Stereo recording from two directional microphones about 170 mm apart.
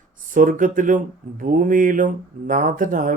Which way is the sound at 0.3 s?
50° right (ahead or behind).